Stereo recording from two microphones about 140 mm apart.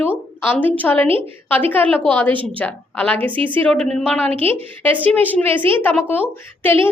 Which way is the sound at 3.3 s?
40° right (ahead or behind).